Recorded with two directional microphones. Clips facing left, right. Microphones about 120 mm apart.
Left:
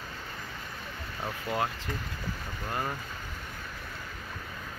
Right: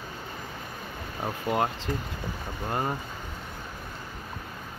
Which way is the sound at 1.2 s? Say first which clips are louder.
Right 5 dB; 20° right (ahead or behind).